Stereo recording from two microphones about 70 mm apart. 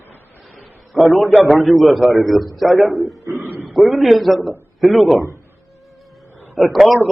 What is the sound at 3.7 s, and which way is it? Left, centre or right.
A man's voice, centre.